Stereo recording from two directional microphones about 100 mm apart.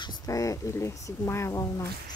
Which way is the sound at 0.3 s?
35° left (ahead or behind).